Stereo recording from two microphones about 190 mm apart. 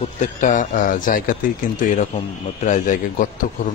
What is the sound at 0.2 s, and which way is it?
A man's voice, 40° left (ahead or behind).